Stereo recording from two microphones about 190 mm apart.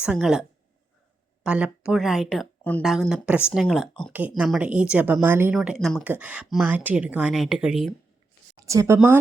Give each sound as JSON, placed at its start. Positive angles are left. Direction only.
{"t": 0.0, "sound": "speech", "side_deg": -5}
{"t": 1.5, "sound": "a woman's voice", "side_deg": -5}
{"t": 5.5, "sound": "speech", "side_deg": 0}
{"t": 8.6, "sound": "speech", "side_deg": -15}